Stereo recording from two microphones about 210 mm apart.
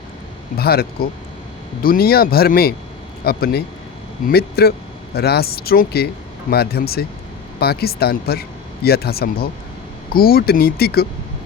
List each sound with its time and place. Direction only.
0.5 s speech: 45° left (ahead or behind)